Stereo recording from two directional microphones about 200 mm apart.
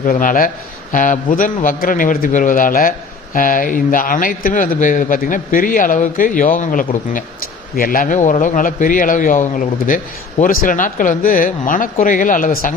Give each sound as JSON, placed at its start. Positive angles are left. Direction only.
{"t": 0.0, "sound": "a man's voice", "side_deg": 40}